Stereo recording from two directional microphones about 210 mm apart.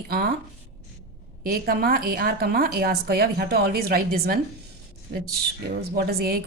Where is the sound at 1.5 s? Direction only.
45° right (ahead or behind).